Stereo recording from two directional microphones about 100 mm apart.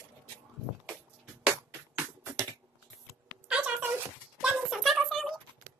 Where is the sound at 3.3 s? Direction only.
10° right (ahead or behind).